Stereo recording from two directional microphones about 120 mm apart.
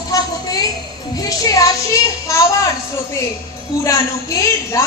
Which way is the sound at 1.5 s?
30° left (ahead or behind).